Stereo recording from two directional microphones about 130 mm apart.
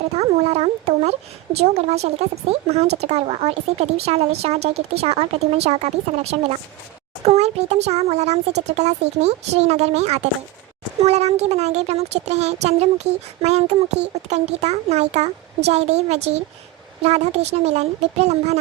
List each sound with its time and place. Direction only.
0.2 s speech: 55° right (ahead or behind)